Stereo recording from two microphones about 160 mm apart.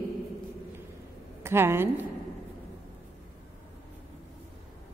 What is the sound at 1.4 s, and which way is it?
Speech, 15° right (ahead or behind).